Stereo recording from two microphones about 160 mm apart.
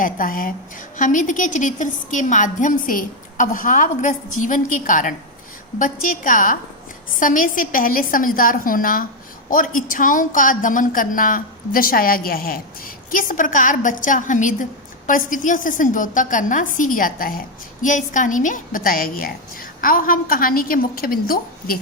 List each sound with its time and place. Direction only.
0.0 s a woman's voice: 60° left (ahead or behind)
17.8 s a woman's voice: 55° left (ahead or behind)